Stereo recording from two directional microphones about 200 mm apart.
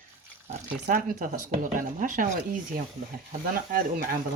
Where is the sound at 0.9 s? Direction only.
40° right (ahead or behind).